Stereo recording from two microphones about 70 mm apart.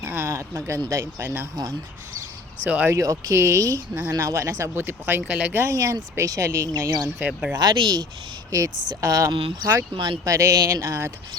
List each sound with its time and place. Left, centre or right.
0.0 s a sound: right
0.3 s speech: right
1.2 s speech: right
2.6 s speech: right
2.9 s speech: right
4.8 s speech: right
5.2 s speech: centre
5.5 s speech: right
7.2 s speech: centre
7.5 s speech: right
8.4 s speech: right